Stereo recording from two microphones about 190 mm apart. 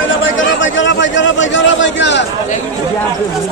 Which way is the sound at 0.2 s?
80° left.